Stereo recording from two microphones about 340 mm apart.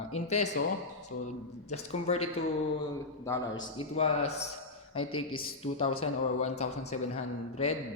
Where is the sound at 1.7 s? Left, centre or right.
Centre.